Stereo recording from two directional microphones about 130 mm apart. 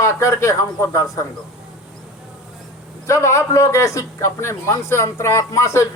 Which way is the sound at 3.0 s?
25° left (ahead or behind).